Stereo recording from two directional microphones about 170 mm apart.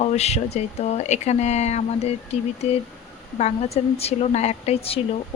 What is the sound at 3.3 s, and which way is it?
Speech, 40° left (ahead or behind).